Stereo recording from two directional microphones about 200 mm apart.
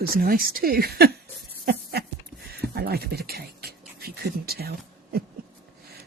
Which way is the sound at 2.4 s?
50° right (ahead or behind).